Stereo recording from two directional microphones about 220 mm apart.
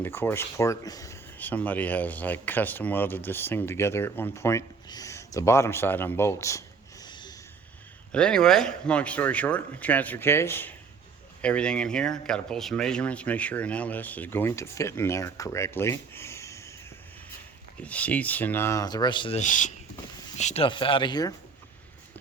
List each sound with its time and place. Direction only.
0.0 s speech: 10° left (ahead or behind)
7.0 s a sound: 20° left (ahead or behind)
8.1 s speech: 5° left (ahead or behind)
17.8 s speech: 5° left (ahead or behind)